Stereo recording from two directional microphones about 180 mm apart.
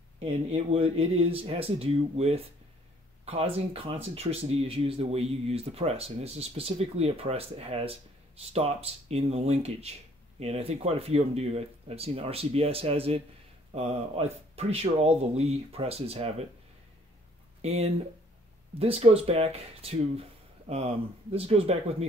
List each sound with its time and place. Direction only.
0.2 s speech: 35° right (ahead or behind)
17.6 s speech: 35° right (ahead or behind)